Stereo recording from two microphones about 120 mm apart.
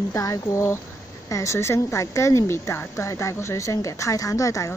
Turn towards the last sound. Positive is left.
turn(degrees=25)  # may be behind; listen again after turning